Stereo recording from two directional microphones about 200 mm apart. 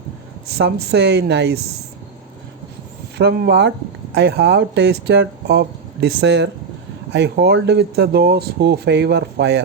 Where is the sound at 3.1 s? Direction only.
55° right (ahead or behind).